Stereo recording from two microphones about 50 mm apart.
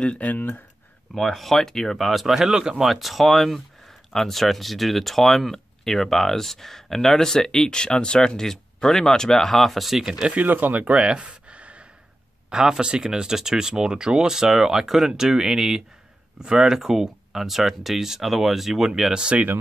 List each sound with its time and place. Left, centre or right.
0.0 s speech: left
1.1 s speech: centre
2.0 s speech: centre
10.2 s speech: right
11.0 s a sound: centre
12.4 s speech: centre
19.3 s speech: right